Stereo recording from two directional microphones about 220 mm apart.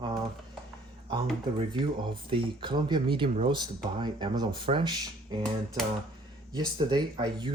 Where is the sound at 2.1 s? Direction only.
20° right (ahead or behind).